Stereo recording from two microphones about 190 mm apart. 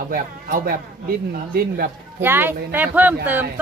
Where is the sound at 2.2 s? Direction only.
10° right (ahead or behind).